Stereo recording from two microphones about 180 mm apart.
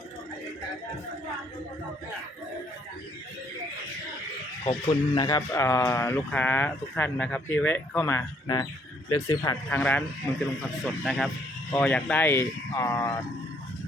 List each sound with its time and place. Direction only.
4.6 s speech: 30° left (ahead or behind)
5.5 s speech: 15° left (ahead or behind)
11.0 s speech: centre (ahead or behind); by 13.1 s 15° left (ahead or behind)